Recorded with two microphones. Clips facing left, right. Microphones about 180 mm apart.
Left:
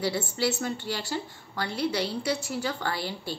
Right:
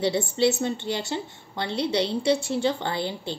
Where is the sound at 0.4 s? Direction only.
25° right (ahead or behind).